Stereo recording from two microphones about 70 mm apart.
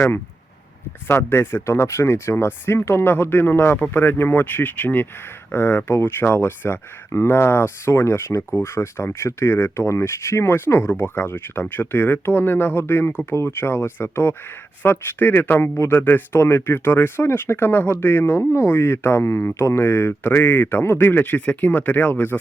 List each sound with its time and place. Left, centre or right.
1.0 s speech: left